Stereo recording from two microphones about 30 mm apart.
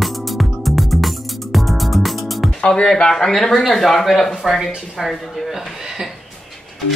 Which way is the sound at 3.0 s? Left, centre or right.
Centre.